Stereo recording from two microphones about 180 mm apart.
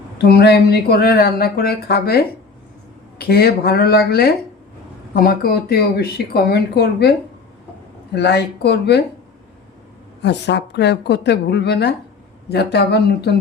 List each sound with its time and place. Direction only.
0.2 s speech: 65° left (ahead or behind)
8.1 s speech: 70° left (ahead or behind)
10.2 s speech: 70° left (ahead or behind)